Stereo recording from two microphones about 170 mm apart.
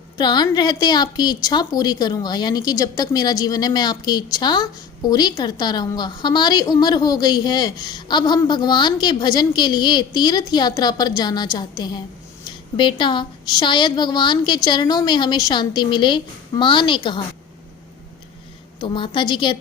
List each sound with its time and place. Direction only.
0.2 s a woman's voice: 25° left (ahead or behind)
18.8 s a woman's voice: 30° left (ahead or behind)